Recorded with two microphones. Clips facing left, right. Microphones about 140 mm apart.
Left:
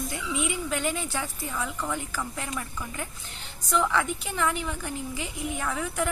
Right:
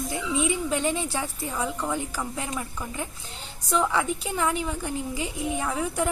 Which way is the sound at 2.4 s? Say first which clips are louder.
Right 2 dB; 20° right (ahead or behind).